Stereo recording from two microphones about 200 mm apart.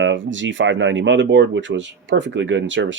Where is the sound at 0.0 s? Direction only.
65° right (ahead or behind).